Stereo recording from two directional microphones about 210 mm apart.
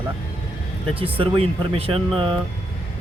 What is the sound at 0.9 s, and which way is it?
Speech, 25° right (ahead or behind).